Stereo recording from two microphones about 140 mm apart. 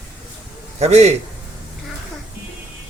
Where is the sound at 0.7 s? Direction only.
50° right (ahead or behind).